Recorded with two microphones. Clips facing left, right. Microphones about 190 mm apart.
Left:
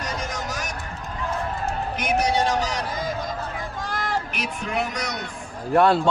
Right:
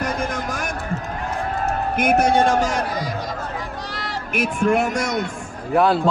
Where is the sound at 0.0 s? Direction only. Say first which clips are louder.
Right 6 dB; 55° right (ahead or behind).